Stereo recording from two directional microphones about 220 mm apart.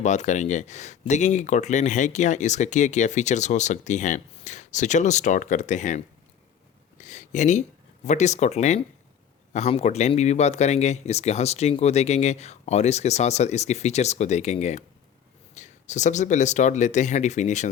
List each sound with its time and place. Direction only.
0.0 s speech: 35° left (ahead or behind)